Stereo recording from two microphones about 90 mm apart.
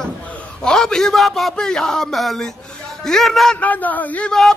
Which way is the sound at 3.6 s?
20° left (ahead or behind).